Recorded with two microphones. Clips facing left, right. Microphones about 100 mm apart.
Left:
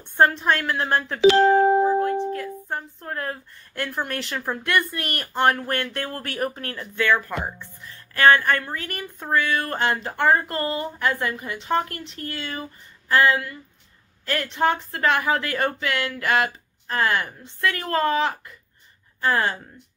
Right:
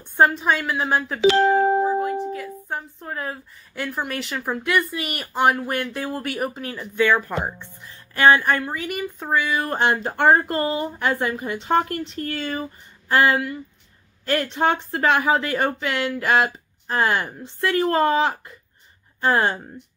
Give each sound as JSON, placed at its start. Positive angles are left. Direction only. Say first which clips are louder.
{"t": 0.2, "sound": "speech", "louder": "right 1 dB", "side_deg": -5}
{"t": 9.7, "sound": "speech", "louder": "right 3 dB", "side_deg": -20}
{"t": 11.3, "sound": "speech", "louder": "right 3 dB", "side_deg": -35}
{"t": 14.4, "sound": "speech", "louder": "left 2 dB", "side_deg": -35}
{"t": 15.0, "sound": "a woman's voice", "louder": "right 2 dB", "side_deg": -15}